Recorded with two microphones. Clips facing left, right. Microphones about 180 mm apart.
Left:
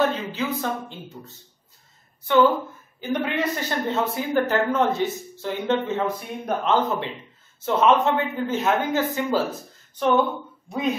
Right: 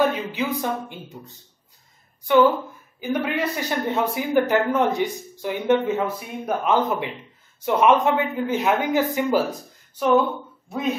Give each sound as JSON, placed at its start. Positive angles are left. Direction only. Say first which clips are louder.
{"t": 0.0, "sound": "a man's voice", "louder": "right 1 dB", "side_deg": -10}
{"t": 3.0, "sound": "a man's voice", "louder": "right 1 dB", "side_deg": -10}